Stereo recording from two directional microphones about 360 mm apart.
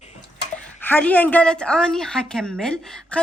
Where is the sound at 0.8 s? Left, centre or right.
Centre.